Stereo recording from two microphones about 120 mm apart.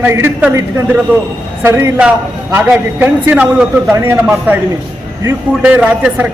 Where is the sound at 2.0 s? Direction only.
10° right (ahead or behind).